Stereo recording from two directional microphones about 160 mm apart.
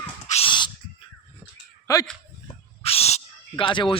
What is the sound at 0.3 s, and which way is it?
Owl, 35° left (ahead or behind).